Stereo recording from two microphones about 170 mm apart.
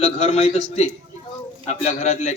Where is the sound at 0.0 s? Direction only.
35° left (ahead or behind).